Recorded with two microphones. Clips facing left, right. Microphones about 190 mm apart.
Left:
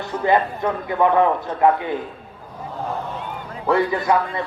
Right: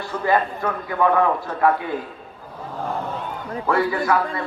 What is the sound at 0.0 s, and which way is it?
A man's voice, 20° left (ahead or behind).